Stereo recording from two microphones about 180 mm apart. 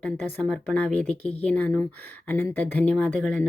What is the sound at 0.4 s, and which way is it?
Speech, 5° left (ahead or behind).